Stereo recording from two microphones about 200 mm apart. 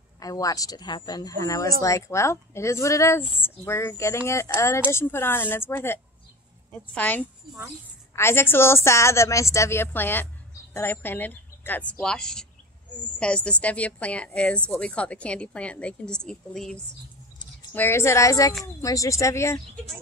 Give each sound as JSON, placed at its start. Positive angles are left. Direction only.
{"t": 0.2, "sound": "a woman's voice", "side_deg": 15}
{"t": 17.7, "sound": "speech", "side_deg": 15}